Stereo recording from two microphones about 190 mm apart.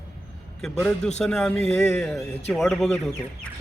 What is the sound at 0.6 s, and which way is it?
A man's voice, 5° left (ahead or behind).